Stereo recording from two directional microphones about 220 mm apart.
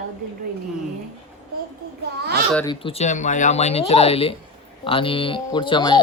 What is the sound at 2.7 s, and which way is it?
Speech, 25° left (ahead or behind).